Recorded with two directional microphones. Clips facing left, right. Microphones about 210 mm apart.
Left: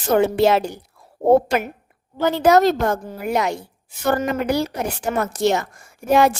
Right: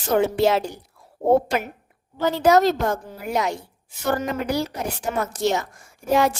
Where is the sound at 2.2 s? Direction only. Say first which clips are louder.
Left 2 dB; 60° left (ahead or behind).